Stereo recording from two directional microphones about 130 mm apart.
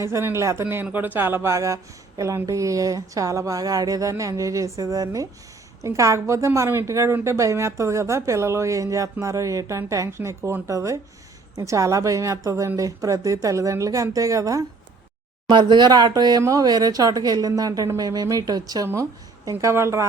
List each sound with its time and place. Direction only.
0.0 s speech: 20° right (ahead or behind)